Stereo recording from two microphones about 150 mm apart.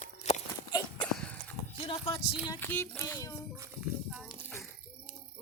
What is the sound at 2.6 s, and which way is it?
Speech, 15° left (ahead or behind).